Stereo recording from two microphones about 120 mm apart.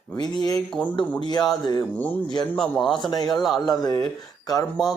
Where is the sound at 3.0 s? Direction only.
35° left (ahead or behind).